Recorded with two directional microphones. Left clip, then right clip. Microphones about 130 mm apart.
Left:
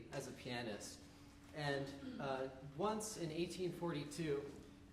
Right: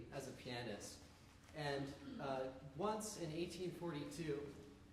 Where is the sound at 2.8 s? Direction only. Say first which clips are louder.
Left 2 dB; 20° left (ahead or behind).